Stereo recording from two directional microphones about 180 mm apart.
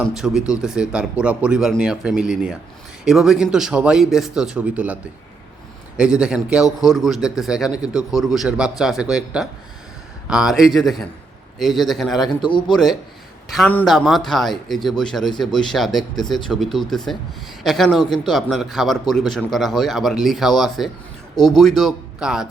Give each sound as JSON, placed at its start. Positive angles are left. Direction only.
{"t": 0.0, "sound": "a man's voice", "side_deg": 0}
{"t": 6.0, "sound": "a man's voice", "side_deg": -5}
{"t": 12.3, "sound": "a man's voice", "side_deg": 25}
{"t": 12.7, "sound": "a man's voice", "side_deg": 0}